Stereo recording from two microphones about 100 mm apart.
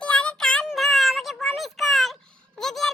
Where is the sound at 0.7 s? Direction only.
Centre (ahead or behind).